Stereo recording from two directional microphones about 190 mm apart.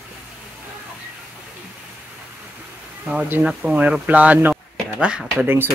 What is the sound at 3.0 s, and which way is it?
Speech, 10° right (ahead or behind).